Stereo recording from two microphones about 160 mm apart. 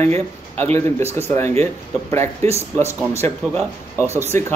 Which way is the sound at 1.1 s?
15° left (ahead or behind).